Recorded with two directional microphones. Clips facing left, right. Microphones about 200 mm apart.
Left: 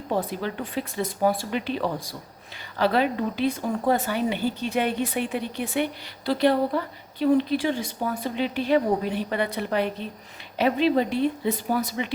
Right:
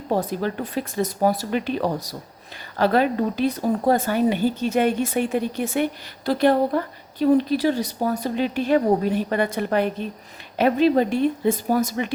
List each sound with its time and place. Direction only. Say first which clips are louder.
0.1 s a woman's voice: right 4 dB; 45° right (ahead or behind)